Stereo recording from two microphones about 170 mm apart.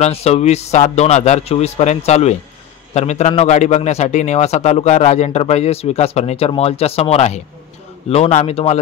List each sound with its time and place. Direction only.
0.0 s a man's voice: 35° left (ahead or behind)